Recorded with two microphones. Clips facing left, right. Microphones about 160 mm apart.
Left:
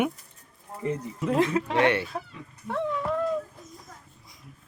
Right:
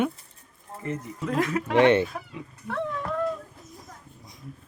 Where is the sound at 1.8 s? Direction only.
20° right (ahead or behind).